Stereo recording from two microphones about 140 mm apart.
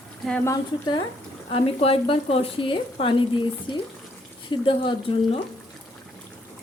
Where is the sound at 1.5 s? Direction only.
40° left (ahead or behind).